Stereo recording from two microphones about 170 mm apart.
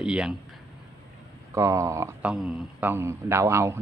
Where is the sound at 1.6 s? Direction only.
15° right (ahead or behind).